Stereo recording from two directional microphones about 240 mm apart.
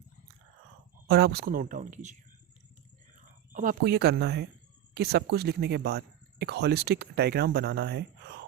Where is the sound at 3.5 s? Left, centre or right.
Right.